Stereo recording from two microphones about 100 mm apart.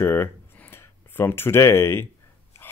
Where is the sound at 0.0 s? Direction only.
25° left (ahead or behind).